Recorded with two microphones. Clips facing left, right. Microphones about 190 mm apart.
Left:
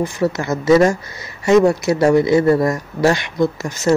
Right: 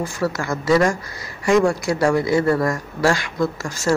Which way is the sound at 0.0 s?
20° left (ahead or behind).